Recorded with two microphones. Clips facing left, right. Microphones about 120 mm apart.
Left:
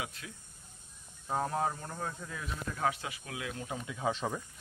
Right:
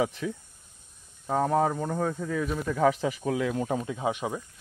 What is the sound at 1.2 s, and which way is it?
Speech, 90° right.